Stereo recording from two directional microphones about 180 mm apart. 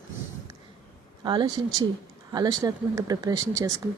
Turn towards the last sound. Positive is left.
turn(degrees=-20)  # may be behind; listen again after turning